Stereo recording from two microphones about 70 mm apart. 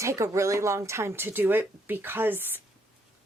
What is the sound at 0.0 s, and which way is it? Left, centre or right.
A woman's voice, right.